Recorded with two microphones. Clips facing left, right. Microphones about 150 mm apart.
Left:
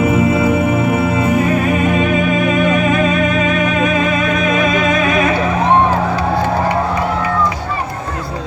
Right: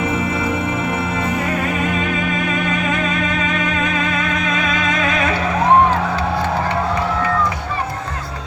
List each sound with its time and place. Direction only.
0.0 s music: 5° left (ahead or behind)
3.8 s music: 10° left (ahead or behind)